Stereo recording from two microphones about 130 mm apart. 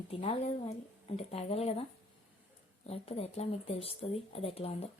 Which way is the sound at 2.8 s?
50° left (ahead or behind).